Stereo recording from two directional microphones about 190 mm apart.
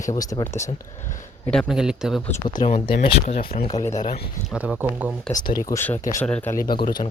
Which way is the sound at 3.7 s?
20° left (ahead or behind).